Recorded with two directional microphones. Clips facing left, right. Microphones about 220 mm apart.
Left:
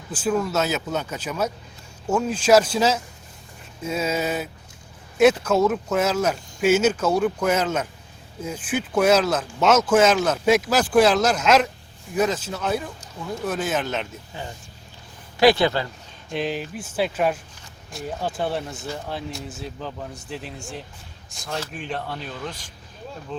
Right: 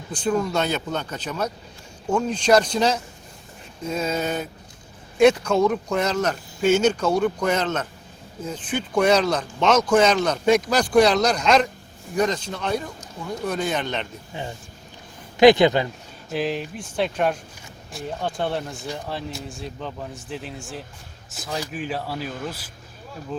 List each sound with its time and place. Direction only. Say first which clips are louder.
0.1 s speech: even; 5° left (ahead or behind)
14.3 s speech: right 4 dB; 20° right (ahead or behind)
16.3 s speech: right 1 dB; centre (ahead or behind)